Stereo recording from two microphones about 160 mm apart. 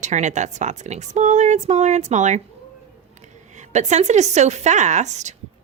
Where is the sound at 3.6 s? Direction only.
45° right (ahead or behind).